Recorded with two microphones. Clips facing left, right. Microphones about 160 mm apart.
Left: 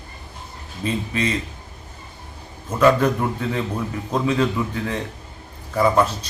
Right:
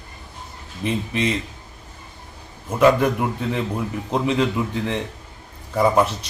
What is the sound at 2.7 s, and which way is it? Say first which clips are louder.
A man's voice: even; 15° right (ahead or behind).